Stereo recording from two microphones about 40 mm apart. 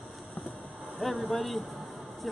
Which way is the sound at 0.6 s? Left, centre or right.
Right.